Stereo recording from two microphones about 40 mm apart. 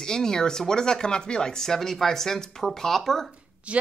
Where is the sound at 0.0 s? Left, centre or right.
Centre.